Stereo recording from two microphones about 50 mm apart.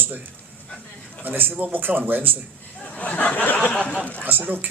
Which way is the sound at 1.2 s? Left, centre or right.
Right.